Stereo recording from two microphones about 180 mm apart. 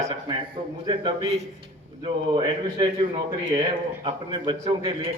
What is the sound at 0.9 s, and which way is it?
A man's voice, 25° right (ahead or behind).